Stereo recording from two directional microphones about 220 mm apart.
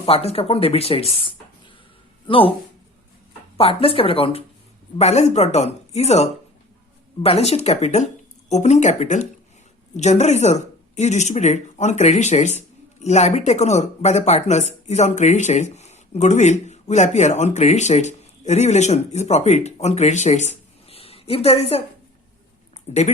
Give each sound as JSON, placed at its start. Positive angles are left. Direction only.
{"t": 0.0, "sound": "speech", "side_deg": 25}
{"t": 3.6, "sound": "speech", "side_deg": 25}
{"t": 22.9, "sound": "speech", "side_deg": 30}